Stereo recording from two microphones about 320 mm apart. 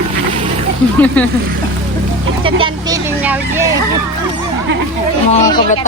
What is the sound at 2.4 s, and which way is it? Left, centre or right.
Speech, centre.